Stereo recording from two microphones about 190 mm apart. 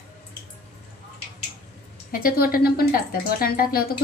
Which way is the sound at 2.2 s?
50° left (ahead or behind).